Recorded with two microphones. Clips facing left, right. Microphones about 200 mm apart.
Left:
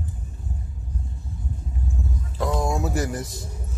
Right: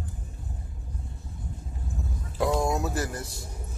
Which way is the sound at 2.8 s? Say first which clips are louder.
Left 4 dB; 15° left (ahead or behind).